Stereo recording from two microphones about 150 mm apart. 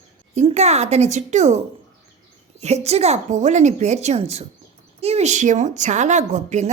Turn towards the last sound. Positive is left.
turn(degrees=-50)  # may be behind; listen again after turning